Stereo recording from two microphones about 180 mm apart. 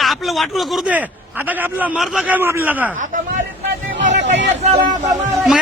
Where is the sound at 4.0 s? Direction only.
85° right.